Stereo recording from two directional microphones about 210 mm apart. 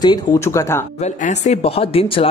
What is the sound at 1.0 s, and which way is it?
Speech, 35° left (ahead or behind).